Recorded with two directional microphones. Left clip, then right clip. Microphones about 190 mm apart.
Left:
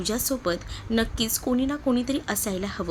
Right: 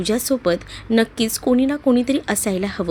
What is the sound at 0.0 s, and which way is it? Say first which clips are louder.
Speech: right 7 dB; 25° right (ahead or behind).